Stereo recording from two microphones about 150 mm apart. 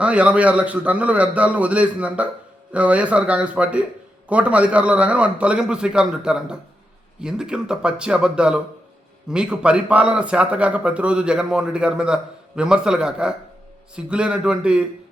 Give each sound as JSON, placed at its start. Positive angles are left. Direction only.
{"t": 0.0, "sound": "a man's voice", "side_deg": -10}